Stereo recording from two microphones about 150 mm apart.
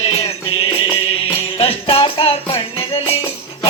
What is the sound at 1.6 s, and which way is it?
Music, 40° left (ahead or behind).